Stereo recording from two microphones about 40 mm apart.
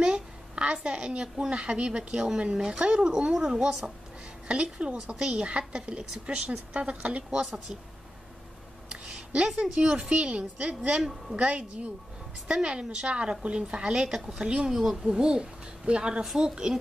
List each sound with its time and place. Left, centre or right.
0.0 s a sound: right
1.5 s a woman's voice: right
2.1 s a woman's voice: centre; by 7.2 s right
7.2 s speech: centre
8.8 s a sound: right
9.6 s a woman's voice: right
14.0 s speech: centre
14.4 s a woman's voice: right
14.7 s a woman's voice: centre